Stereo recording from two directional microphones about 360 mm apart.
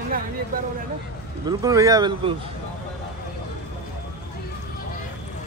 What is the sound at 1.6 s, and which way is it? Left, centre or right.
Speech, centre.